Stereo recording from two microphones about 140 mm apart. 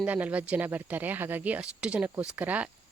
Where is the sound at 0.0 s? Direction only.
10° right (ahead or behind).